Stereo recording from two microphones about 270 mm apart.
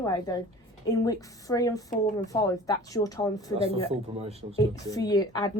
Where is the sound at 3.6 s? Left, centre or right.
Right.